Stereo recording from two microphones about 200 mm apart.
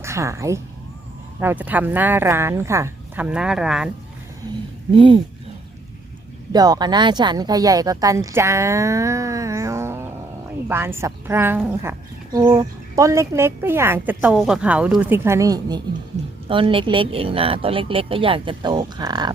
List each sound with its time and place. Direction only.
0.0 s a woman's voice: 15° right (ahead or behind)
4.9 s speech: 25° right (ahead or behind)
6.5 s a woman's voice: 20° right (ahead or behind)